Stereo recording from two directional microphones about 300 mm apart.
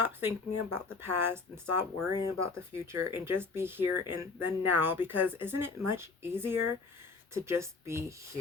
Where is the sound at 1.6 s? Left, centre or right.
Right.